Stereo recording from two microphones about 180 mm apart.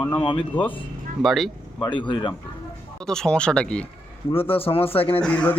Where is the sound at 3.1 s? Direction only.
5° left (ahead or behind).